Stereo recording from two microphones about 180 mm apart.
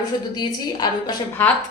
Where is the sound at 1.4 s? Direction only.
10° left (ahead or behind).